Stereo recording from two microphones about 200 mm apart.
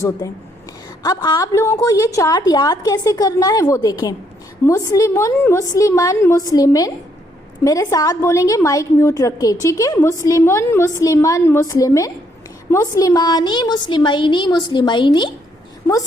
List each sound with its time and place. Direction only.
1.0 s a woman's voice: 20° left (ahead or behind)